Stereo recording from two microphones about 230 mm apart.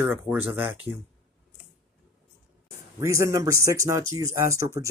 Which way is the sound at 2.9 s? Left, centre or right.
Centre.